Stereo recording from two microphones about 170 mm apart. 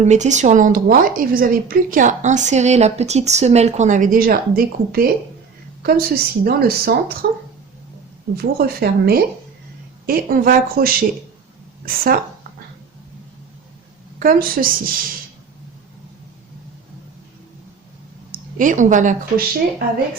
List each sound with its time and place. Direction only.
0.0 s a woman's voice: 45° right (ahead or behind); by 7.0 s 65° right (ahead or behind)
7.2 s speech: 75° right (ahead or behind)
8.4 s a woman's voice: 65° right (ahead or behind)
14.2 s a woman's voice: 55° right (ahead or behind)
18.3 s a woman's voice: 50° right (ahead or behind)